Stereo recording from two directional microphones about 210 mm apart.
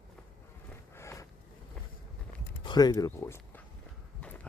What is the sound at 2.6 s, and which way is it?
Speech, 20° left (ahead or behind).